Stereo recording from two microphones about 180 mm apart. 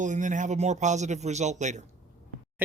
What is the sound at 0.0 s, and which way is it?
Speech, 45° right (ahead or behind).